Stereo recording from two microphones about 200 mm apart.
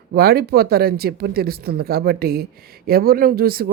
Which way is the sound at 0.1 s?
50° right (ahead or behind).